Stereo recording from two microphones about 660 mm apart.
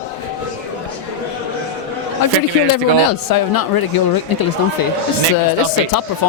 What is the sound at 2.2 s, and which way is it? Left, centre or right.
Speech, left.